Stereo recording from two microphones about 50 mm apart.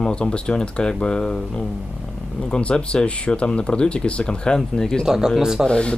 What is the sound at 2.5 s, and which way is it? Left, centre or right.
Speech, left.